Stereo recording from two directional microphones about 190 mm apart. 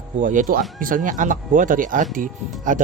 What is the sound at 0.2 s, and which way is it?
Speech, 45° right (ahead or behind).